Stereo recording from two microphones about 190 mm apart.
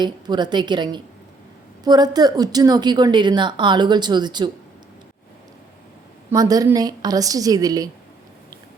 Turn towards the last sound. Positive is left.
turn(degrees=-20)  # may be behind; listen again after turning